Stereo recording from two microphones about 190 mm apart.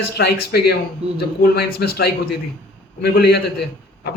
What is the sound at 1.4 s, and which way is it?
A man's voice, 55° left (ahead or behind).